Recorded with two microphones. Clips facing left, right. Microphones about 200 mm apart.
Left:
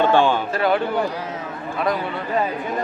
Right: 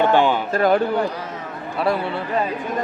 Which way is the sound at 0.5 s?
45° right (ahead or behind).